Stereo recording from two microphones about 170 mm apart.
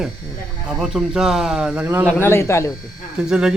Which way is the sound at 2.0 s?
15° left (ahead or behind).